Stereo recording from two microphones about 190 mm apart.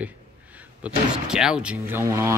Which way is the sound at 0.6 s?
5° right (ahead or behind).